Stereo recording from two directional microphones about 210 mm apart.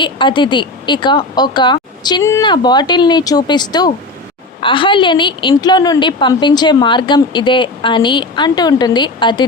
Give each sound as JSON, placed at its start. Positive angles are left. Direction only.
{"t": 0.0, "sound": "a woman's voice", "side_deg": 25}